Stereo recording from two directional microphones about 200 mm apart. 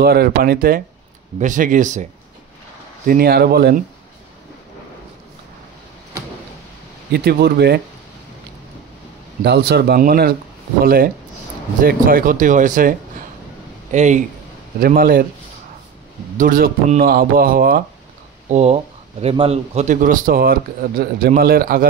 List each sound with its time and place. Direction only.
0.0 s speech: 50° right (ahead or behind)
3.1 s speech: 50° right (ahead or behind)
7.1 s speech: 50° right (ahead or behind)
9.4 s speech: 55° right (ahead or behind)
16.3 s speech: 45° right (ahead or behind)
18.5 s speech: 30° right (ahead or behind); by 21.8 s 50° right (ahead or behind)